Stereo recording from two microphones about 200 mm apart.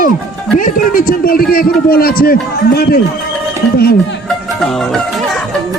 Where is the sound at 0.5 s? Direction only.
40° left (ahead or behind).